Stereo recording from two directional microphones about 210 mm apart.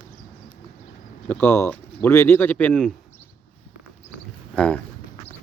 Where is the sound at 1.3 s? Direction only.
10° left (ahead or behind).